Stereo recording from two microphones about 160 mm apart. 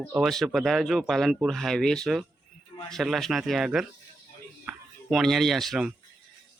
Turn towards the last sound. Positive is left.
turn(degrees=-5)  # may be behind; listen again after turning